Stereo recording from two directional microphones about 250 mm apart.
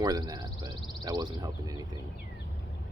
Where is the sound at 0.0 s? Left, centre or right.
Centre.